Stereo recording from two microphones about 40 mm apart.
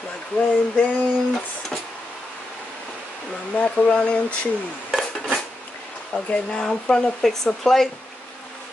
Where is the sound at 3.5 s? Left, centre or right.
Left.